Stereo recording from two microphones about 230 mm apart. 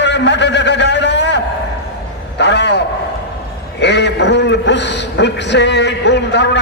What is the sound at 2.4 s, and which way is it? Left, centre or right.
Speech, left.